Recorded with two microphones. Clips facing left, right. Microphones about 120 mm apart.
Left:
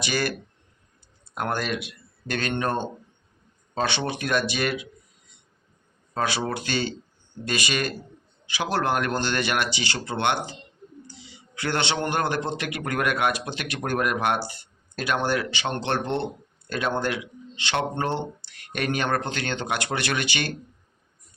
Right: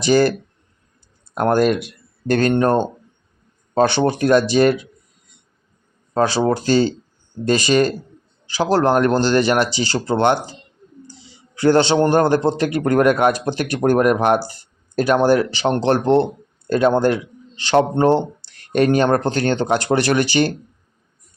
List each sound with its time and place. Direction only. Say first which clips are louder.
0.0 s speech: right 12 dB; 40° right (ahead or behind)
1.4 s speech: right 11 dB; 45° right (ahead or behind)
6.1 s a man's voice: right 10 dB; 35° right (ahead or behind)